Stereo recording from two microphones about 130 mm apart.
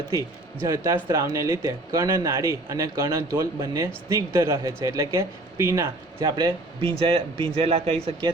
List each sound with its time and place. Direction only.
0.7 s speech: 20° right (ahead or behind)
6.1 s a man's voice: 35° right (ahead or behind)